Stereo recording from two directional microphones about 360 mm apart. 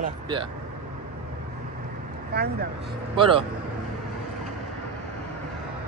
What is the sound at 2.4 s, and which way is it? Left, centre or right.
Speech, right.